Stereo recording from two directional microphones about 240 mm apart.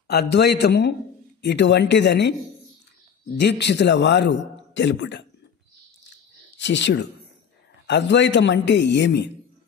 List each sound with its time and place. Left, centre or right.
0.1 s a man's voice: left
3.3 s a man's voice: left
6.5 s a man's voice: left